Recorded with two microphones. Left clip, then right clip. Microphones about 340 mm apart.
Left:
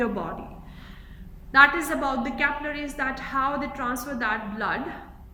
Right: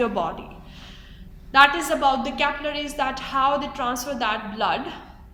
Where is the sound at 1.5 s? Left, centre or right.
Centre.